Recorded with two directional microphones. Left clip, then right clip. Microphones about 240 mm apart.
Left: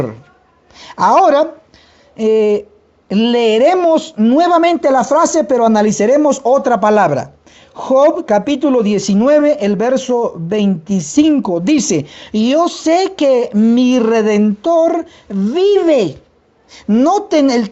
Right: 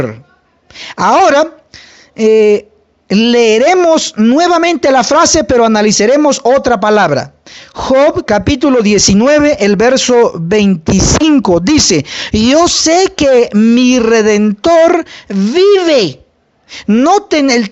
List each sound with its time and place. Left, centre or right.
0.8 s speech: right